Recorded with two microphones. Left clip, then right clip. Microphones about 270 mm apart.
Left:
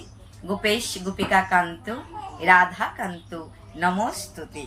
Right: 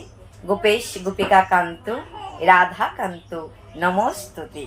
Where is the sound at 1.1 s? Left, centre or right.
Centre.